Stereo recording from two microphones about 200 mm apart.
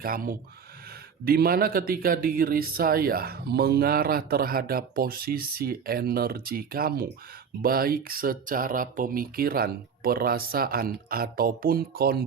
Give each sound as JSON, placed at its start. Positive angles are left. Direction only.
{"t": 0.0, "sound": "speech", "side_deg": -45}